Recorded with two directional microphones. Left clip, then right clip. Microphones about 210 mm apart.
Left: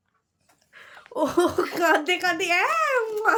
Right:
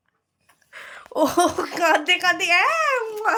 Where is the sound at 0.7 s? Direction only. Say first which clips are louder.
Right 5 dB; 45° right (ahead or behind).